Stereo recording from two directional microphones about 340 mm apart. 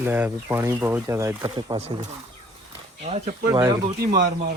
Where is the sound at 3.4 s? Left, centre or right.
Centre.